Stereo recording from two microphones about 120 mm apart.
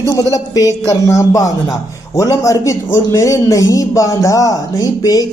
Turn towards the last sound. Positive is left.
turn(degrees=30)  # may be behind; listen again after turning